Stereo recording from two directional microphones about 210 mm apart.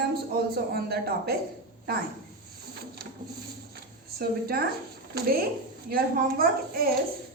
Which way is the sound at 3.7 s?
45° right (ahead or behind).